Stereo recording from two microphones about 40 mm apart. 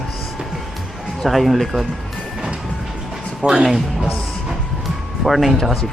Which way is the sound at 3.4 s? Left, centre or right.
Right.